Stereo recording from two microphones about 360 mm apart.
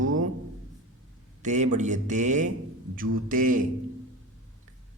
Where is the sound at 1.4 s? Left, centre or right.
Centre.